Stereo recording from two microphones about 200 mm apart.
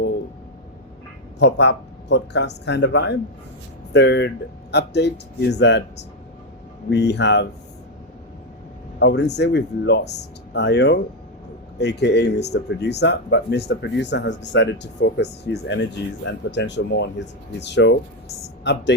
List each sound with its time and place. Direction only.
1.4 s speech: 60° left (ahead or behind)
9.0 s speech: 60° left (ahead or behind)